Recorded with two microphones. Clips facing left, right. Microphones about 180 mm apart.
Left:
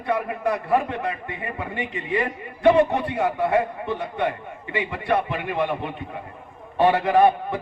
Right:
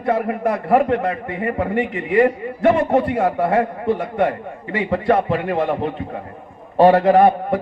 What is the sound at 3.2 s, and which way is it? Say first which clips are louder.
Speech: right 4 dB; 55° right (ahead or behind).